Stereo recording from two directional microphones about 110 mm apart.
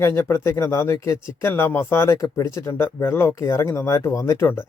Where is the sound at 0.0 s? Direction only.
25° left (ahead or behind).